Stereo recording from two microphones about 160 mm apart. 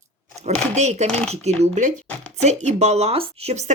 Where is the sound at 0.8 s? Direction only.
45° right (ahead or behind).